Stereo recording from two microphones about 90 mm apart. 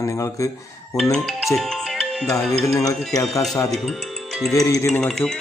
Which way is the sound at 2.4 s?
Centre (ahead or behind).